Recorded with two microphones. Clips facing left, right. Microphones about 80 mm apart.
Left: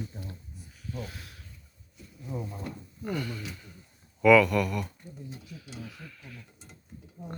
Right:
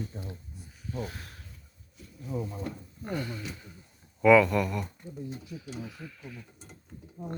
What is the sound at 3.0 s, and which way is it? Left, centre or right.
Speech, right.